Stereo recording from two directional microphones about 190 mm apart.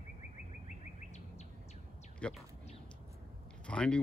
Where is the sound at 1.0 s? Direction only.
35° left (ahead or behind).